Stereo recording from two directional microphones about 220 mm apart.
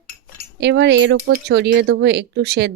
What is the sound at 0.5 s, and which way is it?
Speech, 50° right (ahead or behind).